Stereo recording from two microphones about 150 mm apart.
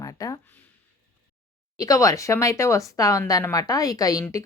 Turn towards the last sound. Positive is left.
turn(degrees=25)  # may be behind; listen again after turning